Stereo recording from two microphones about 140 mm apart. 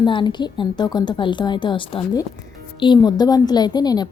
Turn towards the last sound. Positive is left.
turn(degrees=30)  # may be behind; listen again after turning